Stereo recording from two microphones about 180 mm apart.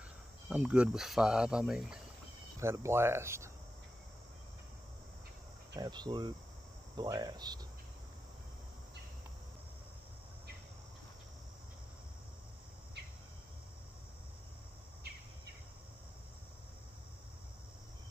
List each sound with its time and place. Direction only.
0.5 s speech: 5° right (ahead or behind)
2.6 s speech: 15° right (ahead or behind)
5.8 s cricket: 25° right (ahead or behind)